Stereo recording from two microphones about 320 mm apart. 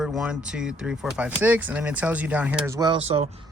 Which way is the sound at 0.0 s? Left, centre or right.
Centre.